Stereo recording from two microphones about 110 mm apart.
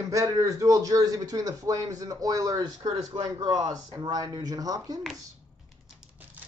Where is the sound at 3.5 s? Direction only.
35° right (ahead or behind).